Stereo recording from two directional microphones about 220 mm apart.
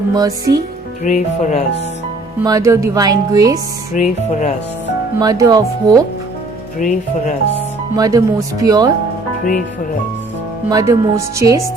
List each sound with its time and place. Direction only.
0.1 s speech: 15° right (ahead or behind)
1.0 s speech: 35° left (ahead or behind)
2.4 s speech: 15° right (ahead or behind)
3.9 s speech: 35° left (ahead or behind)
5.2 s speech: 15° right (ahead or behind)
6.7 s speech: 35° left (ahead or behind)
7.9 s speech: 15° right (ahead or behind)
10.7 s speech: 15° right (ahead or behind)